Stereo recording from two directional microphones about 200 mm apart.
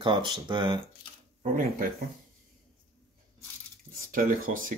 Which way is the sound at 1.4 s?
45° right (ahead or behind).